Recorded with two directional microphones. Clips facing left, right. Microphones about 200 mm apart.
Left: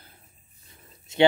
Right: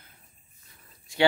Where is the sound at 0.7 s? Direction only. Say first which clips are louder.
Left 5 dB; 20° left (ahead or behind).